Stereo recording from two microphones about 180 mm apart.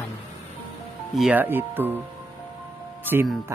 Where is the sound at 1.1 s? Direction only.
5° right (ahead or behind).